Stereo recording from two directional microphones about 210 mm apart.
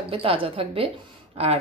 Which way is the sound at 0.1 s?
25° right (ahead or behind).